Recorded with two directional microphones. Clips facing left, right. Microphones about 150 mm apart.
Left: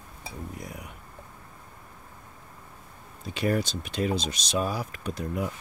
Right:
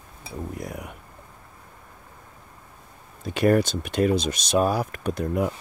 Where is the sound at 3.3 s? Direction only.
55° right (ahead or behind).